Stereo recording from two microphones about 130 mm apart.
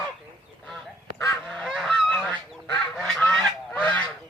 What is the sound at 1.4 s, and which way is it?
Goose, 5° left (ahead or behind).